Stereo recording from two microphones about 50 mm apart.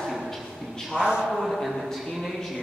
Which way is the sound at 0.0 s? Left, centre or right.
Centre.